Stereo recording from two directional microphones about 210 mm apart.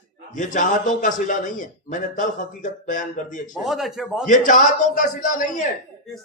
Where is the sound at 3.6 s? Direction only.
Centre (ahead or behind).